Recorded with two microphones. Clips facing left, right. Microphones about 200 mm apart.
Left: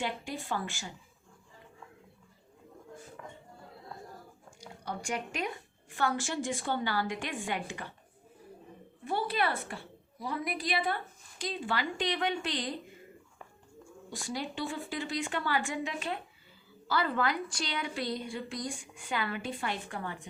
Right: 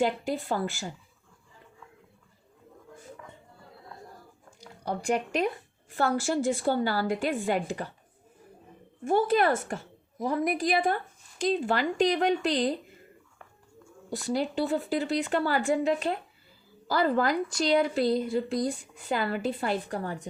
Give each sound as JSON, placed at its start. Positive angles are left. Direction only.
{"t": 0.3, "sound": "a woman's voice", "side_deg": -40}
{"t": 4.9, "sound": "a woman's voice", "side_deg": -35}
{"t": 9.0, "sound": "a woman's voice", "side_deg": -45}
{"t": 14.1, "sound": "a woman's voice", "side_deg": -40}